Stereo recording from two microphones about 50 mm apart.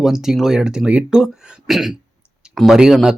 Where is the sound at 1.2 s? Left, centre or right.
Centre.